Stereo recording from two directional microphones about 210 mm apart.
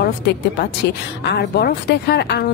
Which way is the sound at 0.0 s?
50° left (ahead or behind).